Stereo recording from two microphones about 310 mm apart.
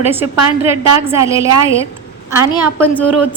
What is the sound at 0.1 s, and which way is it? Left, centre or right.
Speech, centre.